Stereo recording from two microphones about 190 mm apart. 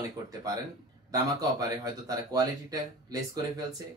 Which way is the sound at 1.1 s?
20° right (ahead or behind).